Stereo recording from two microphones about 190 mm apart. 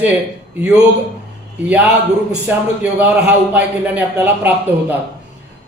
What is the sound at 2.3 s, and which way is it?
A man's voice, 10° right (ahead or behind).